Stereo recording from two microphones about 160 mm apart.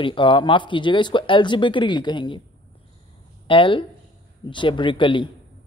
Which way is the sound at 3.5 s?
30° left (ahead or behind).